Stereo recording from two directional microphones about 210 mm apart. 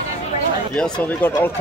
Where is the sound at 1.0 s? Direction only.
10° left (ahead or behind).